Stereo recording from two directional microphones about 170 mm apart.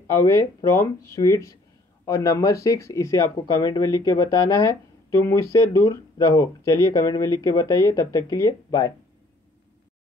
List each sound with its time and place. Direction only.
0.1 s speech: 20° left (ahead or behind)